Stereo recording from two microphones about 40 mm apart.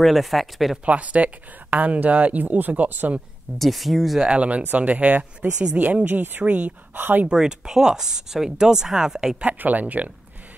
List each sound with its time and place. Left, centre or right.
0.0 s speech: centre
0.8 s speech: right
3.5 s speech: centre
4.2 s speech: right
6.0 s speech: right
6.4 s speech: right
6.9 s speech: right
7.2 s speech: centre
9.4 s speech: right